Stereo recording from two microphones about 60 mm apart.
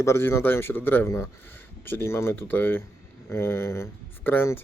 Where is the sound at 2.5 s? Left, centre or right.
Left.